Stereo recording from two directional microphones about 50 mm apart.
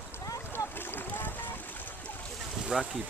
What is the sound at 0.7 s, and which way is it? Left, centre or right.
Boat, left.